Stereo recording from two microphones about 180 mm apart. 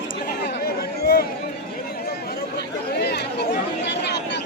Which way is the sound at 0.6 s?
60° left (ahead or behind).